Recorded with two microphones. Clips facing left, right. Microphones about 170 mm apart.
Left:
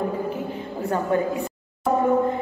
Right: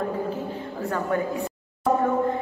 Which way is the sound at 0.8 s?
25° left (ahead or behind).